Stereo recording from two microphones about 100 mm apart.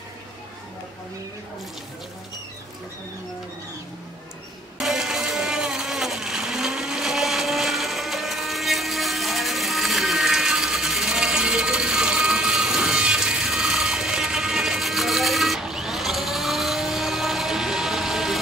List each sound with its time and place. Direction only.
4.7 s vehicle: 5° right (ahead or behind)